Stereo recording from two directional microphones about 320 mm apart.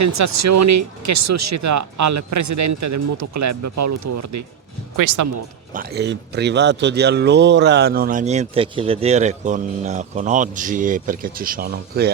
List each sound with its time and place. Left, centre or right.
0.0 s speech: right
5.7 s speech: right